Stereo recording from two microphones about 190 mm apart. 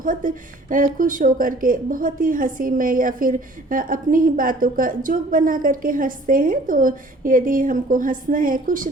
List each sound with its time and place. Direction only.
0.0 s speech: 45° right (ahead or behind)